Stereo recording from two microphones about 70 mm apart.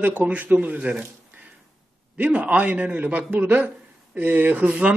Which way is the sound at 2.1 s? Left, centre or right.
Right.